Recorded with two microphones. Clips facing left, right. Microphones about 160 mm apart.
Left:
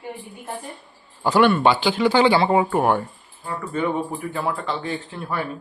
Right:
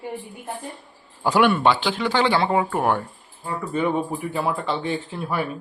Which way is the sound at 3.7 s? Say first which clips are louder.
Right 1 dB; 10° right (ahead or behind).